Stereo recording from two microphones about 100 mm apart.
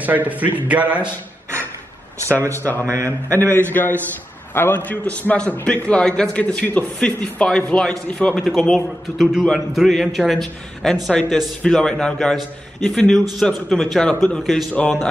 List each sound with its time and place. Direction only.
0.0 s a man's voice: 15° right (ahead or behind)
2.5 s a man's voice: 20° left (ahead or behind)